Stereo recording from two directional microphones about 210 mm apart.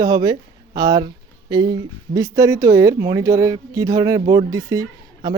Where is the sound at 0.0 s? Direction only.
20° right (ahead or behind).